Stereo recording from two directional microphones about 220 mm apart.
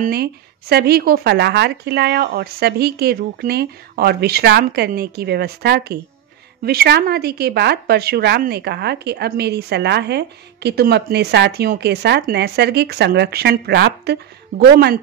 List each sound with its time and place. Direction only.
0.0 s speech: 45° right (ahead or behind)